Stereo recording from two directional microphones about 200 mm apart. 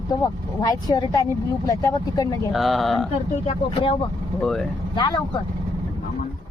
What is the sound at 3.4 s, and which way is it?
Speech, 30° left (ahead or behind).